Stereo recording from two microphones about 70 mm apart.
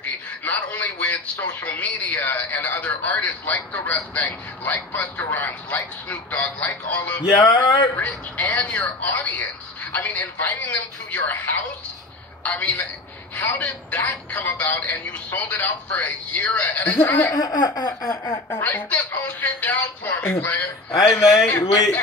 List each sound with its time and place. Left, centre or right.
0.0 s a man's voice: left
7.3 s a sound: left
8.0 s speech: left
17.3 s laughter: left
18.0 s speech: left
20.9 s speech: left